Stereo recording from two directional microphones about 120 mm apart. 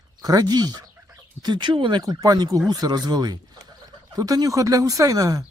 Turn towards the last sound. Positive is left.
turn(degrees=-30)  # may be behind; listen again after turning